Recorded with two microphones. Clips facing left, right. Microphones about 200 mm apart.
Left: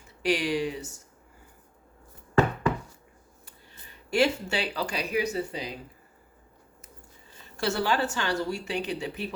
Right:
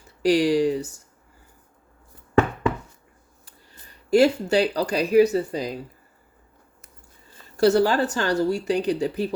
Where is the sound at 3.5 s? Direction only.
35° right (ahead or behind).